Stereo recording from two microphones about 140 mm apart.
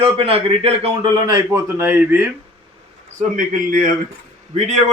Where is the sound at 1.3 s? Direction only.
25° right (ahead or behind).